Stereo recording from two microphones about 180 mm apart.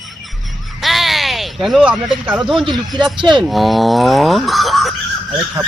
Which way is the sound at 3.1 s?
25° right (ahead or behind).